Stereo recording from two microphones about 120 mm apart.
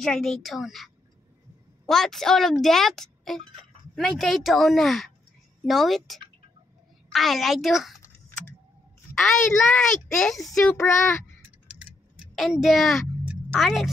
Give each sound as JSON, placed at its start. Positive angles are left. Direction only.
{"t": 0.0, "sound": "speech", "side_deg": 5}
{"t": 9.1, "sound": "speech", "side_deg": 0}
{"t": 10.8, "sound": "speech", "side_deg": 25}
{"t": 12.4, "sound": "speech", "side_deg": 0}